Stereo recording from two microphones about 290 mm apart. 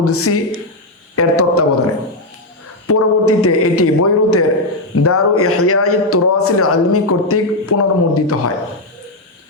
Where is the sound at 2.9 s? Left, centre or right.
Left.